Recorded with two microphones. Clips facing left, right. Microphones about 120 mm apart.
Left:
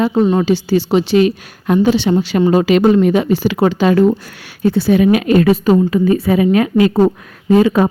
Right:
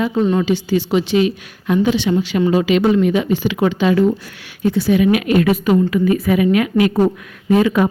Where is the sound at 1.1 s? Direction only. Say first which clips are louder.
Left 4 dB; 45° left (ahead or behind).